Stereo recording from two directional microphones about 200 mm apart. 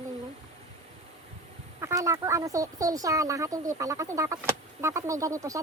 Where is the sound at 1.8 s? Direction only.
15° right (ahead or behind).